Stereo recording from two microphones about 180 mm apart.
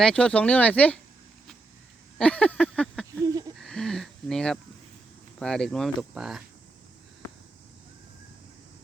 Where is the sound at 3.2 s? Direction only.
20° right (ahead or behind).